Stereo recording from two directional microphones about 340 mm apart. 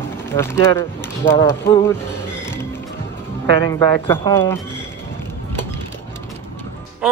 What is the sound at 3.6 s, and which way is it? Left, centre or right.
Speech, centre.